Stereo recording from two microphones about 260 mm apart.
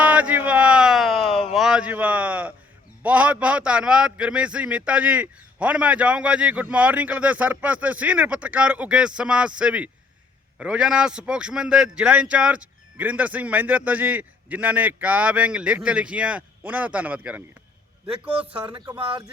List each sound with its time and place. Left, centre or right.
0.0 s a sound: centre
1.5 s a man's voice: centre
18.7 s speech: centre